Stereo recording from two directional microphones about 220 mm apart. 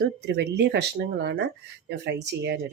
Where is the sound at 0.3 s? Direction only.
50° right (ahead or behind).